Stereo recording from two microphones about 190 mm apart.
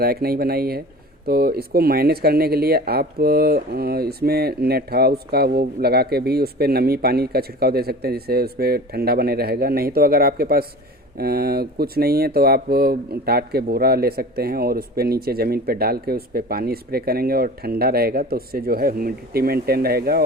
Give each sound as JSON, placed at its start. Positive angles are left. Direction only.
{"t": 0.0, "sound": "speech", "side_deg": -55}